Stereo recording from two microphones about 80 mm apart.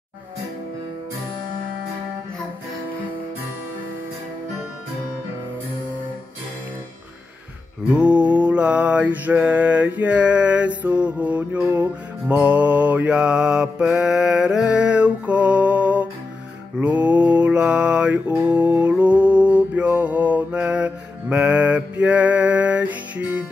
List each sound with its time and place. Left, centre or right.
7.9 s mantra: centre
11.6 s music: right
16.8 s mantra: centre